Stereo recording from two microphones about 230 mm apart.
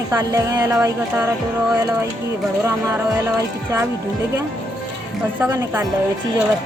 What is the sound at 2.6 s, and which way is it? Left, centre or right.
A woman's voice, centre.